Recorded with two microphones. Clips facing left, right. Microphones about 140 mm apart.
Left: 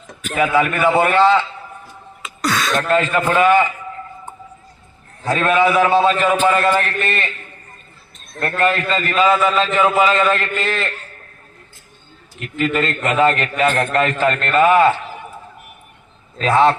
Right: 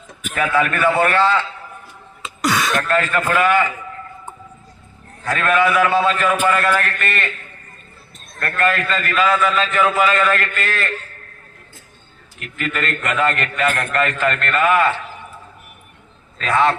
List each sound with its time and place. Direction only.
0.3 s a man's voice: 15° left (ahead or behind)
2.4 s throat clearing: 10° right (ahead or behind)
2.8 s a man's voice: 20° left (ahead or behind)
5.2 s a man's voice: 25° left (ahead or behind)
8.4 s a man's voice: 25° left (ahead or behind)
12.5 s a man's voice: 25° left (ahead or behind)
16.4 s a man's voice: 30° left (ahead or behind)